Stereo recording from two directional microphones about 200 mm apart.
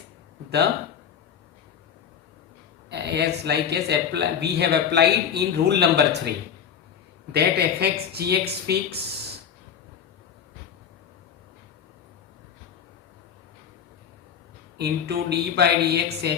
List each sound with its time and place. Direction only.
2.9 s speech: 55° right (ahead or behind)
7.3 s speech: 55° right (ahead or behind)
14.8 s speech: 55° right (ahead or behind)